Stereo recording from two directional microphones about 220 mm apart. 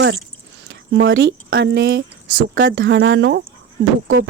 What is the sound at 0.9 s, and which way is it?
Speech, 60° right (ahead or behind).